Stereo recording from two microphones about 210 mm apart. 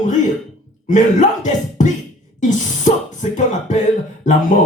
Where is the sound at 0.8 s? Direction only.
35° left (ahead or behind).